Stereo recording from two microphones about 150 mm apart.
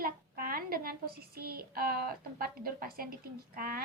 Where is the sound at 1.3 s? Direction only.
90° right.